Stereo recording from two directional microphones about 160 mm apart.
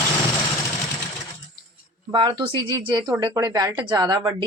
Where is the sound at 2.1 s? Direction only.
30° right (ahead or behind).